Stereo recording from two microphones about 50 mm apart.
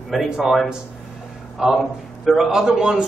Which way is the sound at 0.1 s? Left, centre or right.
Centre.